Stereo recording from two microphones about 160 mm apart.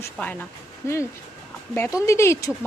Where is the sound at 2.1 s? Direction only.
15° left (ahead or behind).